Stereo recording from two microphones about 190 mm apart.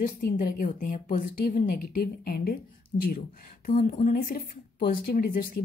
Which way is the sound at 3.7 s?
45° left (ahead or behind).